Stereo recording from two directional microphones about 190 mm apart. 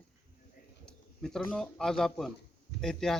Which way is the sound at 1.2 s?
5° left (ahead or behind).